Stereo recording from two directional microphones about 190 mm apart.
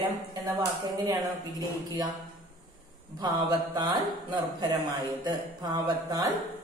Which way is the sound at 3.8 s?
20° right (ahead or behind).